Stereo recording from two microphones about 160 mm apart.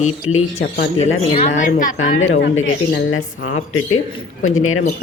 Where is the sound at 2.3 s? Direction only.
90° left.